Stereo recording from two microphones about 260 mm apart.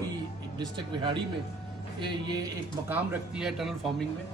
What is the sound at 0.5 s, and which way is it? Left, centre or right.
Speech, centre.